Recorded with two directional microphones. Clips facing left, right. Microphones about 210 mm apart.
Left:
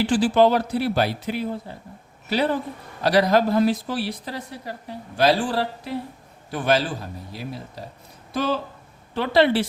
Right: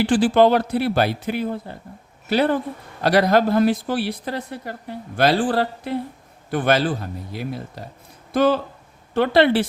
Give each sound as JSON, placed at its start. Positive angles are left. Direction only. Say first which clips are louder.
{"t": 0.0, "sound": "speech", "louder": "right 2 dB", "side_deg": -55}